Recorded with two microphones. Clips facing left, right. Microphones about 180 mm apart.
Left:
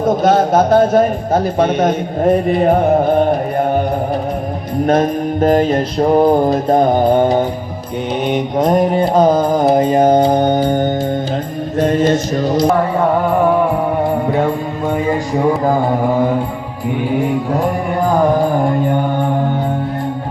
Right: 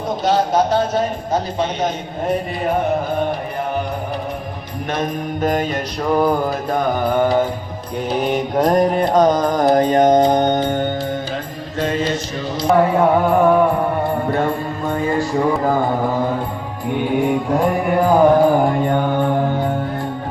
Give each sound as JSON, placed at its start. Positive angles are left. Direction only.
{"t": 0.0, "sound": "a man's voice", "side_deg": 50}
{"t": 4.9, "sound": "mantra", "side_deg": 40}
{"t": 8.1, "sound": "music", "side_deg": 0}
{"t": 9.0, "sound": "mantra", "side_deg": 30}
{"t": 9.5, "sound": "music", "side_deg": 5}
{"t": 10.2, "sound": "mantra", "side_deg": 30}
{"t": 10.4, "sound": "music", "side_deg": 10}
{"t": 10.7, "sound": "music", "side_deg": 40}
{"t": 11.8, "sound": "a man's voice", "side_deg": 50}
{"t": 12.6, "sound": "music", "side_deg": 0}
{"t": 17.0, "sound": "music", "side_deg": 0}